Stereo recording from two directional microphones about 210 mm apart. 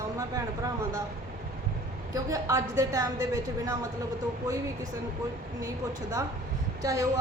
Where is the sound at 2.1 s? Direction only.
15° right (ahead or behind).